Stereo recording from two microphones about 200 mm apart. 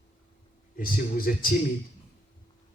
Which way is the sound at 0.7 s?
45° left (ahead or behind).